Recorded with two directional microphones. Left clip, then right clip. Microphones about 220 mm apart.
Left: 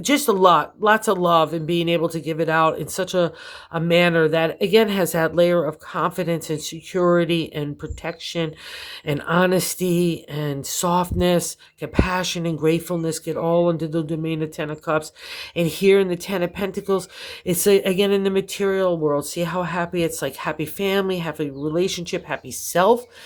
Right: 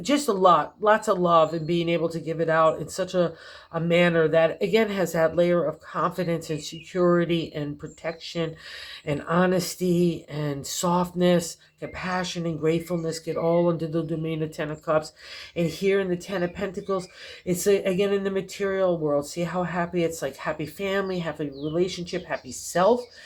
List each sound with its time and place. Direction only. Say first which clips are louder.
0.0 s speech: left 4 dB; 35° left (ahead or behind)